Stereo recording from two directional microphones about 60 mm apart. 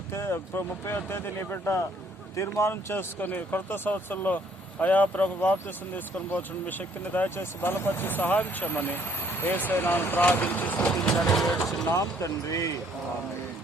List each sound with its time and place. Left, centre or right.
0.1 s speech: left
10.8 s vehicle: centre
11.1 s speech: centre
11.9 s speech: left